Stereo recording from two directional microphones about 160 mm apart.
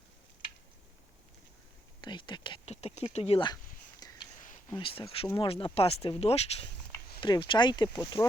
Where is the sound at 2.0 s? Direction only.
30° left (ahead or behind).